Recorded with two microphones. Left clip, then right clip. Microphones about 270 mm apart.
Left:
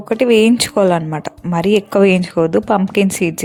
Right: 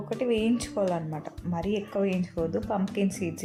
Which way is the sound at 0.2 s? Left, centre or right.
Left.